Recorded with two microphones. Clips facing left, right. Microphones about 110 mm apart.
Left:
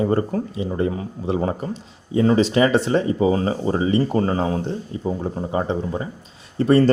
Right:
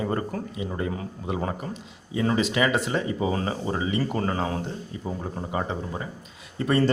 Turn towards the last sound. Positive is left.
turn(degrees=35)  # may be behind; listen again after turning